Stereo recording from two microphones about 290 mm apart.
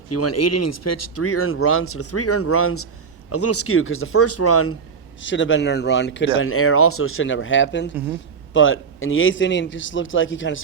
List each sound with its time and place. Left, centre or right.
0.1 s speech: left
5.2 s a man's voice: left